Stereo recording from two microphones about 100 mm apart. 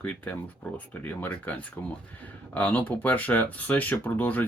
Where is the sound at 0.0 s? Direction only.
15° left (ahead or behind).